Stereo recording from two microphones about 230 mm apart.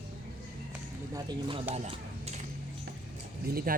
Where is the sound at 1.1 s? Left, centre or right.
Centre.